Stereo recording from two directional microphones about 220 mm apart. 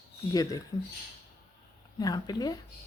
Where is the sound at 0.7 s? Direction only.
20° left (ahead or behind).